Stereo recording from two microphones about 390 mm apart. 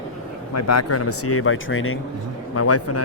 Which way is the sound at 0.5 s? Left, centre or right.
Left.